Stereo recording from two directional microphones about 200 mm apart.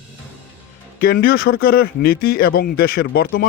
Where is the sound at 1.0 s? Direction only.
50° left (ahead or behind).